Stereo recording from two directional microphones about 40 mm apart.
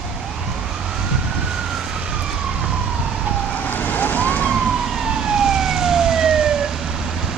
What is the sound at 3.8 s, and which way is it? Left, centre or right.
Vehicle, left.